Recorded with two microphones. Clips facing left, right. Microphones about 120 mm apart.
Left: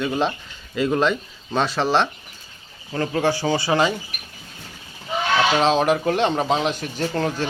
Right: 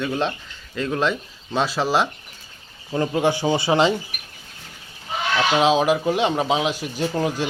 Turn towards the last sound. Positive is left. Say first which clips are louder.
# even
turn(degrees=-10)  # may be behind; listen again after turning